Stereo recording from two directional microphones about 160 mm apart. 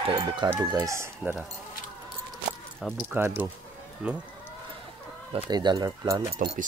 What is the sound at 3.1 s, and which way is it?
Speech, 10° right (ahead or behind).